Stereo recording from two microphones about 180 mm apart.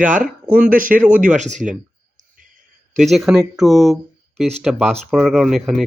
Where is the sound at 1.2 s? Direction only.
40° right (ahead or behind).